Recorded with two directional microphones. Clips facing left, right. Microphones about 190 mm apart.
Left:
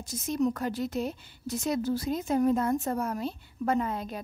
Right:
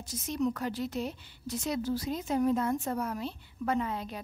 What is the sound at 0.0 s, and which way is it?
A woman's voice, 45° left (ahead or behind).